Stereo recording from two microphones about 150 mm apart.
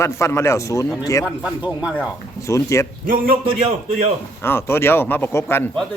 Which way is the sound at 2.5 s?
20° left (ahead or behind).